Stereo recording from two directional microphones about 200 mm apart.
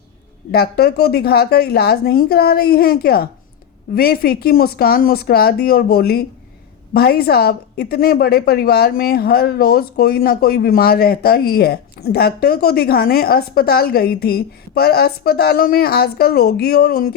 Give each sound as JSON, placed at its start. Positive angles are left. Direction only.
{"t": 0.5, "sound": "a woman's voice", "side_deg": 50}